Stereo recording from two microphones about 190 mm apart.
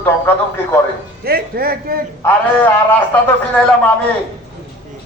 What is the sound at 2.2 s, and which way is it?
A man's voice, 10° left (ahead or behind).